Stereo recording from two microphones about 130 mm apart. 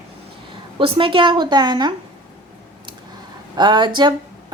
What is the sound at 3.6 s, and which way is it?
Speech, 35° right (ahead or behind).